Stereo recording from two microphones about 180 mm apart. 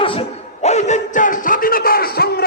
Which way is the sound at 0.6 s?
40° left (ahead or behind).